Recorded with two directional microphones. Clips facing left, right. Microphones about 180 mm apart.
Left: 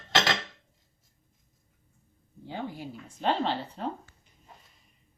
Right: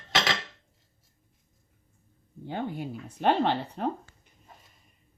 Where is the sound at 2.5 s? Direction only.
55° right (ahead or behind).